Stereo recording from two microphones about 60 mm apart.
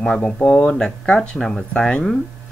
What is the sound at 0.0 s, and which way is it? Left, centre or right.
Speech, centre.